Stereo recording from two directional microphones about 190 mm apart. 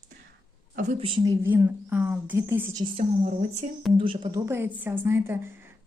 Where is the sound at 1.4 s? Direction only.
10° right (ahead or behind).